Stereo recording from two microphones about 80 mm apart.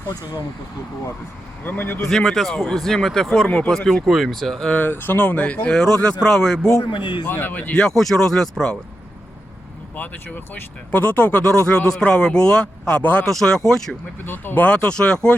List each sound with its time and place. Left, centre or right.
1.6 s speech: left
2.0 s speech: centre
4.7 s speech: left; by 6.7 s centre
7.3 s speech: left
7.7 s speech: centre
9.9 s speech: left
13.2 s speech: centre
14.3 s speech: left